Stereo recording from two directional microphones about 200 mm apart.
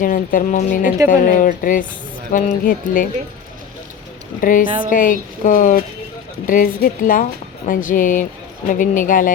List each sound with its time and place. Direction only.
0.0 s a woman's voice: 45° left (ahead or behind)
4.4 s a woman's voice: 45° left (ahead or behind)